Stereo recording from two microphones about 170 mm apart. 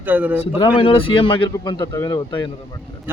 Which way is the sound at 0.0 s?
10° right (ahead or behind).